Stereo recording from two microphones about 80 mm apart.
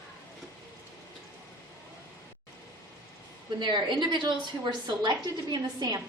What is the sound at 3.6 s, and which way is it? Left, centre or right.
A woman's voice, right.